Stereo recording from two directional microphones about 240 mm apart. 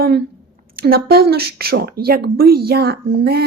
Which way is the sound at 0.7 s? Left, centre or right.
Right.